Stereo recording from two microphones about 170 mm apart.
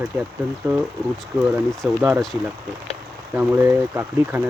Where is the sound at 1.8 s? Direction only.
5° right (ahead or behind).